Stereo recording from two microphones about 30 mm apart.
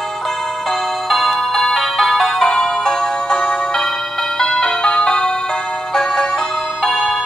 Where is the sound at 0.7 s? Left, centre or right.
Centre.